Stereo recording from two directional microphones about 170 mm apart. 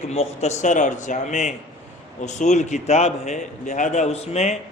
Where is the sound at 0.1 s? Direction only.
40° left (ahead or behind).